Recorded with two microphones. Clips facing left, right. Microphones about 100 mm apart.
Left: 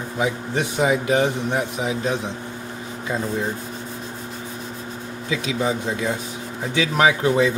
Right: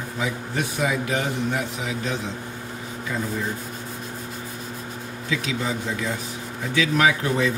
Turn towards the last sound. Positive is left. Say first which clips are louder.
# left 4 dB
turn(degrees=20)  # may be behind; listen again after turning